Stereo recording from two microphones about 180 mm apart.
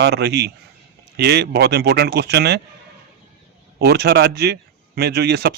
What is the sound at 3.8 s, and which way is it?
Speech, 65° right (ahead or behind).